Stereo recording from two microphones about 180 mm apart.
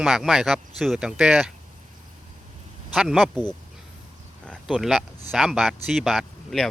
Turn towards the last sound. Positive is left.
turn(degrees=0)  # may be behind; listen again after turning